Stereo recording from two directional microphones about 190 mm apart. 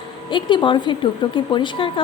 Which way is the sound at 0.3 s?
25° left (ahead or behind).